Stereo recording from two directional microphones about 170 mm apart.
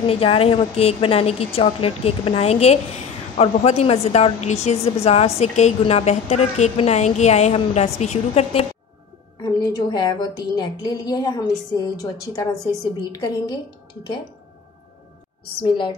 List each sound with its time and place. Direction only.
0.0 s a woman's voice: 30° left (ahead or behind)
9.4 s a woman's voice: 25° left (ahead or behind)